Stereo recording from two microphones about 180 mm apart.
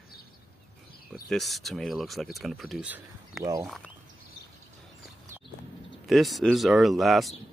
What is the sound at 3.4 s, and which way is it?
Speech, 20° right (ahead or behind).